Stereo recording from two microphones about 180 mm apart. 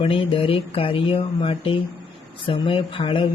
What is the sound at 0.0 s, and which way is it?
Speech, 30° left (ahead or behind).